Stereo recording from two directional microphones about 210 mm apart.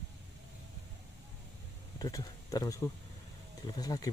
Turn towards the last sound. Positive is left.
turn(degrees=15)  # may be behind; listen again after turning